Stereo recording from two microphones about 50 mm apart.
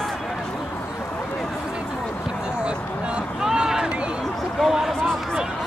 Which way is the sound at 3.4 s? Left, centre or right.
Centre.